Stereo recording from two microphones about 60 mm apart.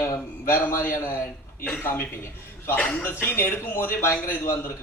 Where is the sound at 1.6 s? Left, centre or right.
Left.